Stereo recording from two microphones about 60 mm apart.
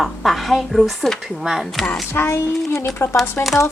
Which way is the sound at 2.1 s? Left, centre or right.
Left.